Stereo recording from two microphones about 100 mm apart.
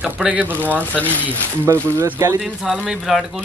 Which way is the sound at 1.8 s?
25° right (ahead or behind).